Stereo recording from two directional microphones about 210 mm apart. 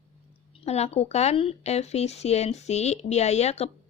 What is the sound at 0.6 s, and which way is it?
A woman's voice, 30° left (ahead or behind).